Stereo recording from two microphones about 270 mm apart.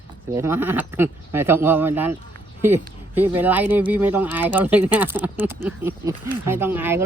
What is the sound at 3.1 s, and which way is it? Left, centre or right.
Speech, centre.